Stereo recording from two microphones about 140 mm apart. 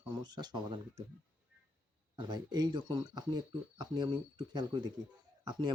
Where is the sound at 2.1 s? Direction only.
30° right (ahead or behind).